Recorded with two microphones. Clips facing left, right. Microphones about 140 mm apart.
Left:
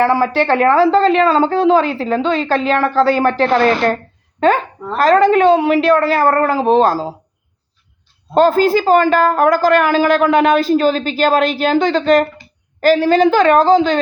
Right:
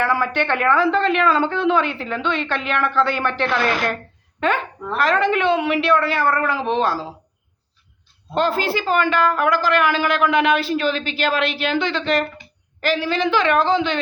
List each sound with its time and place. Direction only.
0.0 s a woman's voice: 30° left (ahead or behind)
8.4 s a woman's voice: 40° left (ahead or behind)